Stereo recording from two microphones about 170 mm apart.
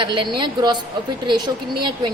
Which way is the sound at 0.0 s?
30° right (ahead or behind).